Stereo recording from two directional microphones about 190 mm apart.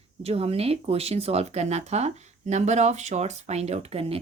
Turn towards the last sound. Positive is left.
turn(degrees=-30)  # may be behind; listen again after turning